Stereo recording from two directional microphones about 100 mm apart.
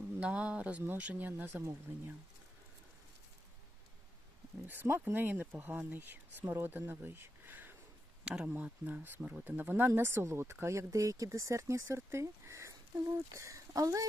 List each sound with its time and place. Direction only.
0.2 s speech: 10° right (ahead or behind)
4.6 s speech: 20° right (ahead or behind); by 14.1 s 35° right (ahead or behind)